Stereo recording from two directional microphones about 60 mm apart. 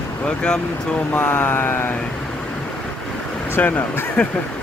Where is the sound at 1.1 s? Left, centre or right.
Left.